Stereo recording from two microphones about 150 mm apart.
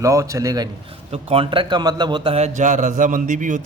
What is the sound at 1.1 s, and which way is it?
A man's voice, 35° right (ahead or behind).